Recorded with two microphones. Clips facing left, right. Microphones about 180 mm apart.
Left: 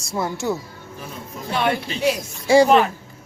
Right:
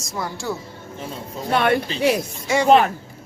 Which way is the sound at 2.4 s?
30° left (ahead or behind).